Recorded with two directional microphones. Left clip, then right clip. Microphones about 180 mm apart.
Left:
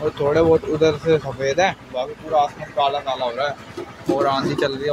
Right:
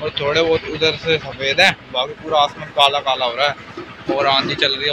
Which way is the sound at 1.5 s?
15° left (ahead or behind).